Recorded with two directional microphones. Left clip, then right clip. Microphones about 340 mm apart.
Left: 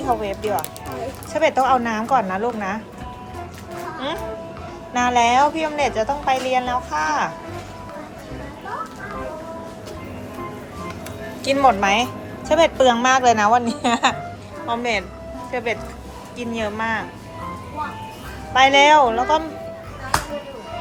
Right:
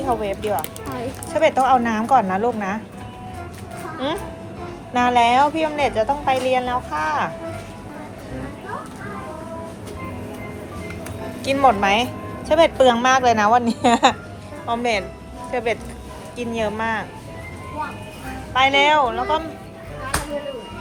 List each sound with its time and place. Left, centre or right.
0.0 s a woman's voice: centre
4.9 s a woman's voice: centre
11.4 s a woman's voice: centre
18.5 s a woman's voice: centre